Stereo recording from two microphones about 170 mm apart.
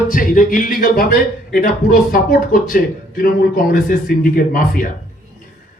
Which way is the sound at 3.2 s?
55° left (ahead or behind).